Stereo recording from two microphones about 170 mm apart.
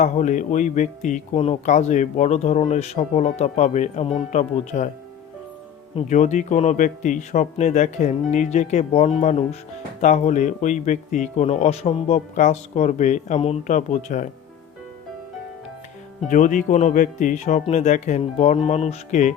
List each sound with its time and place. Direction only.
0.0 s speech: 45° left (ahead or behind)
5.9 s speech: 40° left (ahead or behind)
16.3 s speech: 50° left (ahead or behind)